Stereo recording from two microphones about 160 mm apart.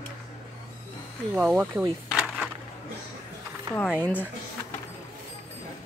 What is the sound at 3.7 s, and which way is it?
Speech, 35° right (ahead or behind).